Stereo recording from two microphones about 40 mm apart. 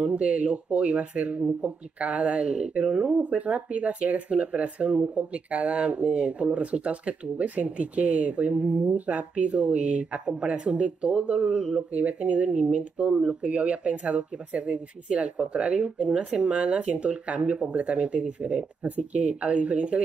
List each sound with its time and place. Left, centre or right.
0.0 s speech: right
11.9 s speech: right